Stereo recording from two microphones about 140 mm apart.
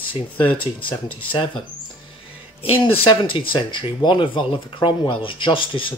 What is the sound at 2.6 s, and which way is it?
Speech, 40° left (ahead or behind).